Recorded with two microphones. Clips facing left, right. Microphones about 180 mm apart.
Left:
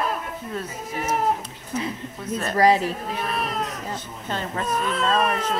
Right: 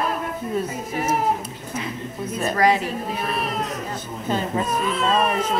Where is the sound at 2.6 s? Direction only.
30° left (ahead or behind).